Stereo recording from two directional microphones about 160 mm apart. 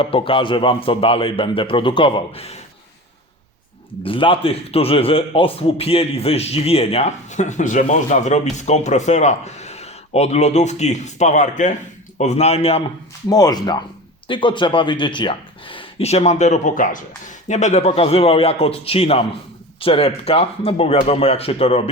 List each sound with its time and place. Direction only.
0.0 s speech: 35° left (ahead or behind)
4.0 s a man's voice: 35° left (ahead or behind)
13.3 s speech: 25° left (ahead or behind); by 21.8 s 40° left (ahead or behind)